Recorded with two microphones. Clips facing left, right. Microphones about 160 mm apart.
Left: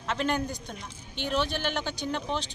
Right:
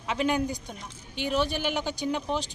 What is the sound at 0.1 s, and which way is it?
A man's voice, 10° right (ahead or behind).